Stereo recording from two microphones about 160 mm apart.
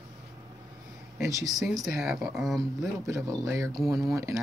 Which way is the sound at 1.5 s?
Centre (ahead or behind).